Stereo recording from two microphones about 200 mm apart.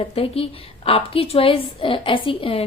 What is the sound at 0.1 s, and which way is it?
A woman's voice, 30° left (ahead or behind).